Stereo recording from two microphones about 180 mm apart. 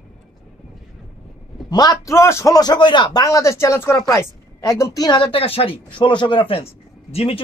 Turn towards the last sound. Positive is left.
turn(degrees=35)  # may be behind; listen again after turning